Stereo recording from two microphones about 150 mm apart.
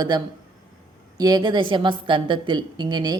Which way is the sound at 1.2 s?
25° right (ahead or behind).